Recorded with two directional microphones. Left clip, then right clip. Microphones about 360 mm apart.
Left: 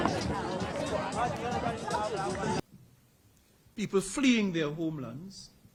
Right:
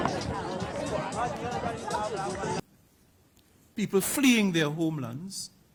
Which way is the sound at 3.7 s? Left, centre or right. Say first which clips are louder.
Right 3 dB; right.